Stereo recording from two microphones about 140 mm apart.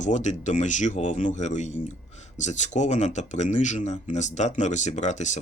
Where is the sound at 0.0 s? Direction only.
60° left (ahead or behind).